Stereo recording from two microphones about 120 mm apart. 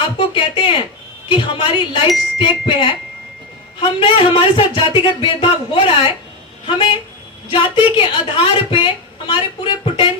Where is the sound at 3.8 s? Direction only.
45° left (ahead or behind).